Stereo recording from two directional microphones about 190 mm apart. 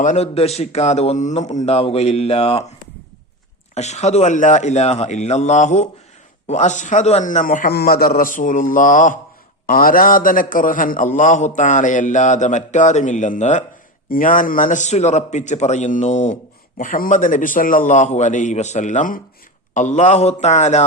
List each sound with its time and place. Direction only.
0.0 s a man's voice: 35° left (ahead or behind)
3.8 s a man's voice: 35° left (ahead or behind)